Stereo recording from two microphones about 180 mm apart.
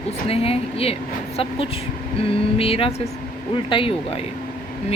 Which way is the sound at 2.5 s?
30° left (ahead or behind).